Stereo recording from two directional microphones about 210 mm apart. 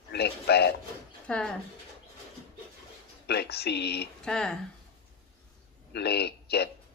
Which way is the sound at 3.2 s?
50° left (ahead or behind).